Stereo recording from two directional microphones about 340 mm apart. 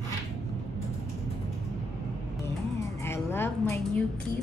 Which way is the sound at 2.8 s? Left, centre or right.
Centre.